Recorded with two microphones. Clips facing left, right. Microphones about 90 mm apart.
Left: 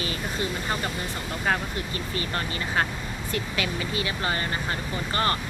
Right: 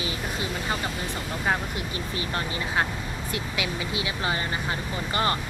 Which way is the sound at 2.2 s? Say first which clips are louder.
Even; 5° right (ahead or behind).